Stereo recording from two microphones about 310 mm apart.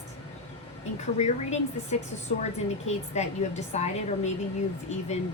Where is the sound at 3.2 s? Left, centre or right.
Left.